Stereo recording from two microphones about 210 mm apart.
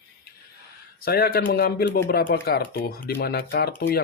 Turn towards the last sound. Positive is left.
turn(degrees=50)  # may be behind; listen again after turning